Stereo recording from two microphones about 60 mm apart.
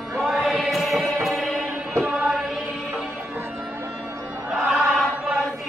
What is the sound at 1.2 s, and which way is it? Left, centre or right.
Music, centre.